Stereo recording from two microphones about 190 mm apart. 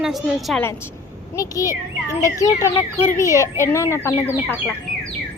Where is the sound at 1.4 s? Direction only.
15° left (ahead or behind).